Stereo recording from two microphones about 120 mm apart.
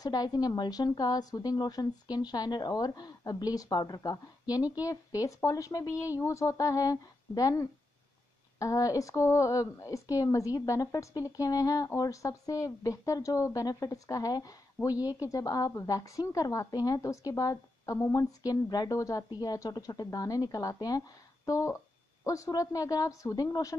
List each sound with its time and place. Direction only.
0.0 s a woman's voice: 35° left (ahead or behind)